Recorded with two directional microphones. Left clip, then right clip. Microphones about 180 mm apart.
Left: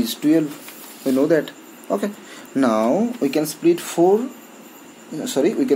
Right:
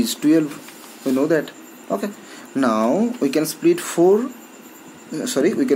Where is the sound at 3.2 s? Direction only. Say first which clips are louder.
Right 1 dB; 15° right (ahead or behind).